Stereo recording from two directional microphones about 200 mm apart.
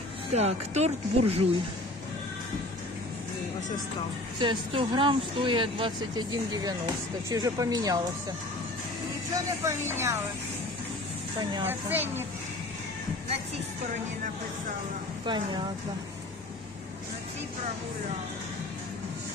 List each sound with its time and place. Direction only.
0.3 s speech: 35° right (ahead or behind)
4.4 s speech: 25° right (ahead or behind)
9.3 s speech: 15° right (ahead or behind)
11.6 s speech: 10° right (ahead or behind)
15.2 s speech: 25° right (ahead or behind)